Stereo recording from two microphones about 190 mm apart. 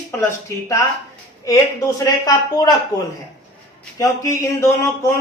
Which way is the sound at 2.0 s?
20° left (ahead or behind).